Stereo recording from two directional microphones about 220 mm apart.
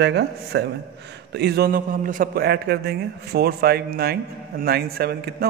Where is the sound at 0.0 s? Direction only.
50° right (ahead or behind).